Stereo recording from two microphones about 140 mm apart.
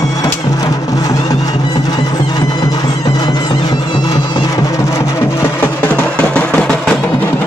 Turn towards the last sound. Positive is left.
turn(degrees=5)  # may be behind; listen again after turning